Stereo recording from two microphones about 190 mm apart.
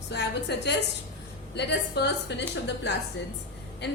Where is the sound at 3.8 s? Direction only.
60° left (ahead or behind).